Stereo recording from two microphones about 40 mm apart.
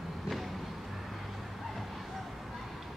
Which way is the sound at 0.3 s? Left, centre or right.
Centre.